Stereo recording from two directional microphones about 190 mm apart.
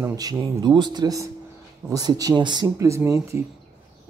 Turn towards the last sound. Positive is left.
turn(degrees=-15)  # may be behind; listen again after turning